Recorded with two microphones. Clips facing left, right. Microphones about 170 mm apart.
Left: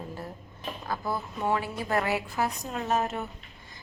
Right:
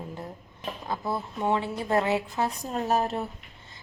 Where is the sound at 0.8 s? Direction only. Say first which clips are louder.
Right 1 dB; 25° right (ahead or behind).